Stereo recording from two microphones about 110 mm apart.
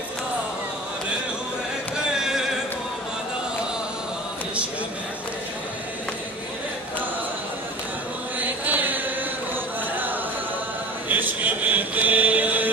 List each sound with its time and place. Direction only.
2.1 s music: 5° right (ahead or behind)
8.4 s chant: 15° right (ahead or behind)
11.1 s mantra: 15° right (ahead or behind)